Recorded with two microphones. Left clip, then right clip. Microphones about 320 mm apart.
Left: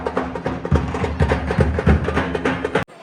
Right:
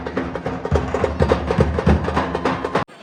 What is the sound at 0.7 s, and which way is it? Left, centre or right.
Music, right.